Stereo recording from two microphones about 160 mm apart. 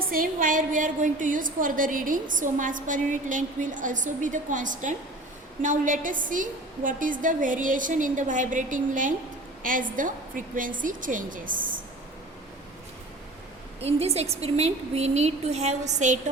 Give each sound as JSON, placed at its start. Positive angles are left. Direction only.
{"t": 0.0, "sound": "a woman's voice", "side_deg": -65}
{"t": 13.8, "sound": "a woman's voice", "side_deg": -40}